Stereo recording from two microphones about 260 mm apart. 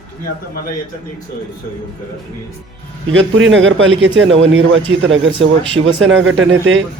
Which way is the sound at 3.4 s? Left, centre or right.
Right.